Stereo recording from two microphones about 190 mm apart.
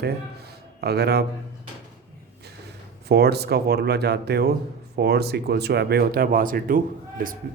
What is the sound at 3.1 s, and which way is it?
A man's voice, 60° right (ahead or behind).